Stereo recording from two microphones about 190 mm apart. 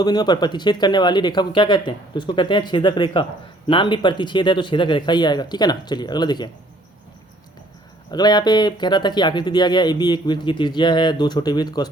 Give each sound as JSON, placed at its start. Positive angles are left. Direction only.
{"t": 0.0, "sound": "speech", "side_deg": 20}
{"t": 8.1, "sound": "speech", "side_deg": 20}